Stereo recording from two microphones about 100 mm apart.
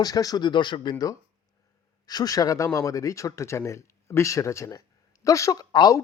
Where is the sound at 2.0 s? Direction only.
40° left (ahead or behind).